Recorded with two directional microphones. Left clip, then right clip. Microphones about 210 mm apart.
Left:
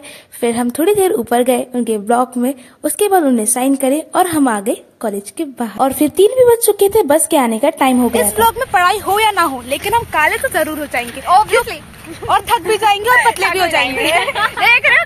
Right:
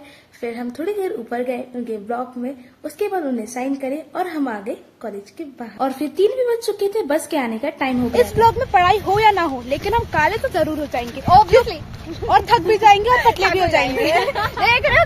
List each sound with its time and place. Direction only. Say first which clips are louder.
0.4 s a woman's voice: left 11 dB; 45° left (ahead or behind)
8.4 s speech: left 2 dB; 10° left (ahead or behind)
11.6 s speech: left 1 dB; 5° right (ahead or behind)
13.8 s a woman's voice: left 3 dB; 20° right (ahead or behind)